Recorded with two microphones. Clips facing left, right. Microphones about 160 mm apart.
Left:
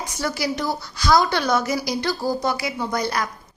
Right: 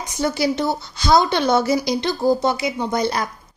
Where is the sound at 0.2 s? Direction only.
25° right (ahead or behind).